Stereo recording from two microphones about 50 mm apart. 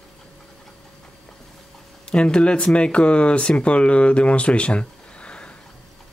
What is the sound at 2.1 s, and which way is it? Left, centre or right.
Speech, left.